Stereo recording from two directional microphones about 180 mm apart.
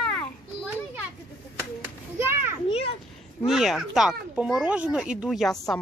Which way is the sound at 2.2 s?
15° right (ahead or behind).